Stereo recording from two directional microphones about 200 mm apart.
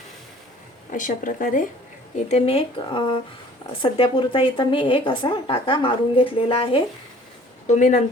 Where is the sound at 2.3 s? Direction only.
30° left (ahead or behind).